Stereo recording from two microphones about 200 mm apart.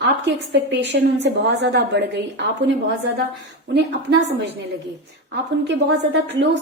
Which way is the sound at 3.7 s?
55° right (ahead or behind).